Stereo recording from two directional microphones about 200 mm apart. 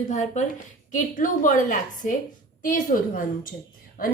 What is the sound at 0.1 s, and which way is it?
A woman's voice, 35° left (ahead or behind).